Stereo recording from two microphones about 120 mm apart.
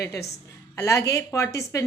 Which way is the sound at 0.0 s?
25° left (ahead or behind).